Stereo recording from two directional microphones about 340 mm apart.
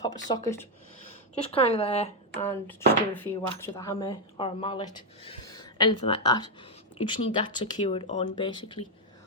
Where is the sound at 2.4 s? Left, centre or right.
Centre.